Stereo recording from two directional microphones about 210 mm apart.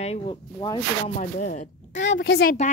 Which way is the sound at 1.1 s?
35° left (ahead or behind).